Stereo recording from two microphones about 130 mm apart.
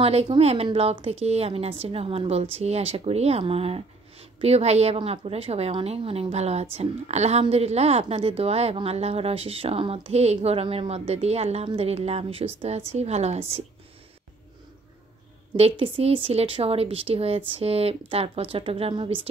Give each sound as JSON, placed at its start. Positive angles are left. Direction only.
{"t": 0.0, "sound": "a woman's voice", "side_deg": -50}
{"t": 15.8, "sound": "a woman's voice", "side_deg": -45}